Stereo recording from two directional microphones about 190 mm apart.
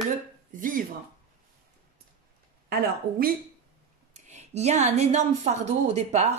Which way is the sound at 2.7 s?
50° right (ahead or behind).